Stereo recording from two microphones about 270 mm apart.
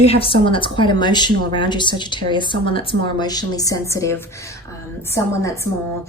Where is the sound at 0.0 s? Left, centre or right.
Left.